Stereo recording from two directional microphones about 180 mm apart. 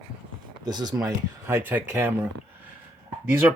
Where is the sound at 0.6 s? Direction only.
20° right (ahead or behind).